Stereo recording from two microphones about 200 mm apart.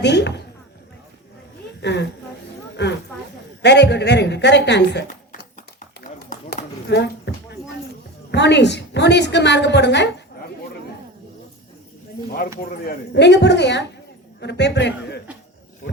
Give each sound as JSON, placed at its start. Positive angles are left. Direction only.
{"t": 0.0, "sound": "a sound", "side_deg": 60}
{"t": 1.8, "sound": "a woman's voice", "side_deg": 60}
{"t": 2.8, "sound": "a sound", "side_deg": 60}
{"t": 3.6, "sound": "a woman's voice", "side_deg": 60}
{"t": 6.1, "sound": "run", "side_deg": 55}
{"t": 6.8, "sound": "a woman's voice", "side_deg": 55}
{"t": 12.6, "sound": "a woman's voice", "side_deg": 50}